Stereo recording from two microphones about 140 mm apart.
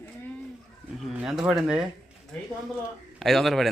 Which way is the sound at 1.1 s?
5° right (ahead or behind).